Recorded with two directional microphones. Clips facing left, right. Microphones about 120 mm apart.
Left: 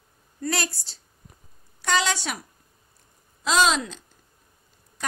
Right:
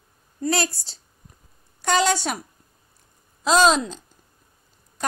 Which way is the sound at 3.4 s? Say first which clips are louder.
Right 4 dB; 40° right (ahead or behind).